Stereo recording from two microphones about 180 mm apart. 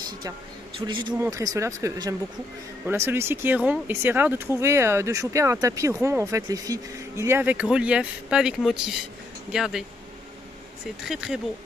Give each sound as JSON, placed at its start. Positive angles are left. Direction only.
{"t": 0.7, "sound": "speech", "side_deg": -25}
{"t": 11.1, "sound": "speech", "side_deg": -5}